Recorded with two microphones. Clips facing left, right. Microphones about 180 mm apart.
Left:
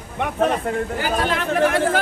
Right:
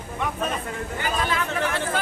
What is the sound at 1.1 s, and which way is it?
Speech, 55° left (ahead or behind).